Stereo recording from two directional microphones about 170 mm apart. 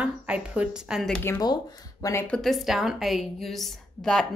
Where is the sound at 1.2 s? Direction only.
15° left (ahead or behind).